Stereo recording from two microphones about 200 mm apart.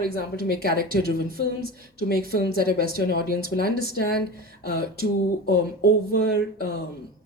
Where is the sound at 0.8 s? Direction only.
45° right (ahead or behind).